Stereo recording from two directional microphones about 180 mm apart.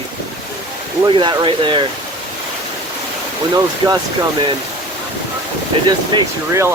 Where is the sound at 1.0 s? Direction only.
25° right (ahead or behind).